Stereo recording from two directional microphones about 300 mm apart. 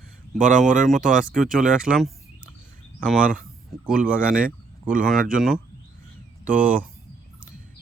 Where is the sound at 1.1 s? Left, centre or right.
Centre.